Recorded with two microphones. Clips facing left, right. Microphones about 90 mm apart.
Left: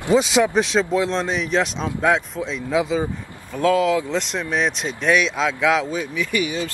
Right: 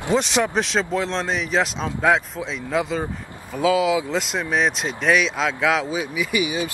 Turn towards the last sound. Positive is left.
turn(degrees=-15)  # may be behind; listen again after turning